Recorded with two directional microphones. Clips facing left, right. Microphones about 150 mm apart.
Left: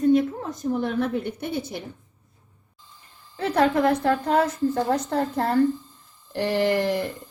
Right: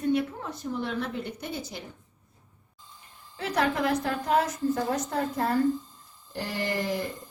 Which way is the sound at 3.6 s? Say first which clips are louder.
Left 6 dB; 55° left (ahead or behind).